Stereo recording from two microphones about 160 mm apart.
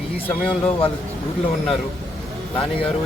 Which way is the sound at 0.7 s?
35° left (ahead or behind).